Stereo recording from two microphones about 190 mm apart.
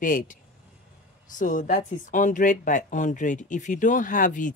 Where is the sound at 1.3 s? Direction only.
45° left (ahead or behind).